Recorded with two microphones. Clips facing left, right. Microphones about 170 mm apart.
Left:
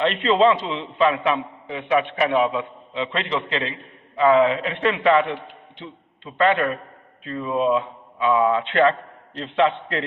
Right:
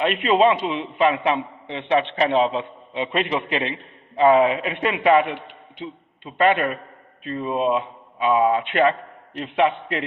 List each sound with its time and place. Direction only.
0.1 s a man's voice: 15° right (ahead or behind)
6.5 s speech: 20° right (ahead or behind)